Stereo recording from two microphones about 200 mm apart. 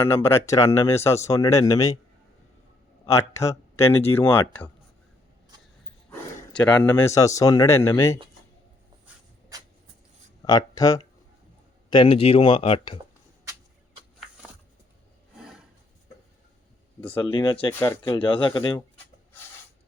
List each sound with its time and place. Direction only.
0.0 s speech: 10° left (ahead or behind)
3.1 s speech: 15° left (ahead or behind)
6.1 s speech: 5° left (ahead or behind)
9.5 s a sound: 15° right (ahead or behind)
10.4 s speech: 20° left (ahead or behind)
17.1 s speech: 25° left (ahead or behind)
17.7 s speech: 10° left (ahead or behind)
18.1 s speech: 25° left (ahead or behind)